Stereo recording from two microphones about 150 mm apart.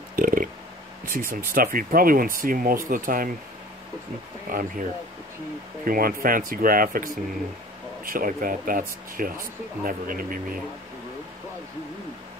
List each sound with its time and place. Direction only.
0.1 s a sound: 65° right (ahead or behind)
1.0 s speech: 65° right (ahead or behind)
4.5 s speech: 65° right (ahead or behind)
5.9 s speech: 75° right (ahead or behind)